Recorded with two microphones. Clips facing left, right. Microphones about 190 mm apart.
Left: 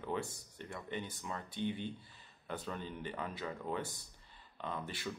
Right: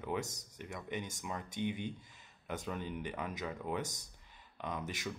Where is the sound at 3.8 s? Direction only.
45° right (ahead or behind).